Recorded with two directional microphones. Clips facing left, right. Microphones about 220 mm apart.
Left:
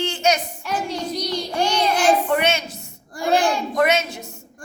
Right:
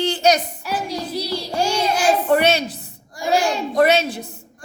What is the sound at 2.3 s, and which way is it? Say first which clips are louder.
Speech: right 4 dB; 35° right (ahead or behind).